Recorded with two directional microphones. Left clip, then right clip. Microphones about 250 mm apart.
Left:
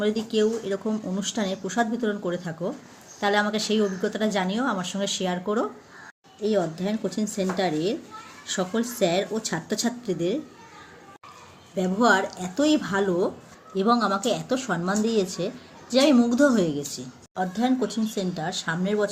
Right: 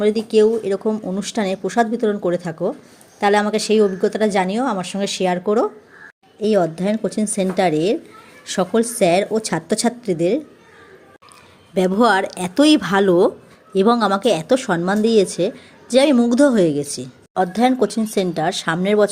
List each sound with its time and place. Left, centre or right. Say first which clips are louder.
0.0 s speech: right 9 dB; right
11.7 s speech: right 6 dB; right